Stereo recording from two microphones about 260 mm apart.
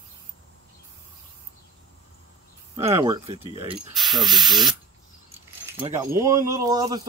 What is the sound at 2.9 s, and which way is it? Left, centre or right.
Speech, centre.